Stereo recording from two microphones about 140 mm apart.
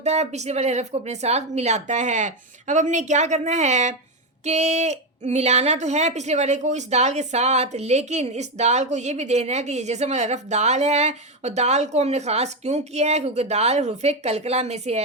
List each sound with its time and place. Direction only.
0.0 s a woman's voice: 50° right (ahead or behind)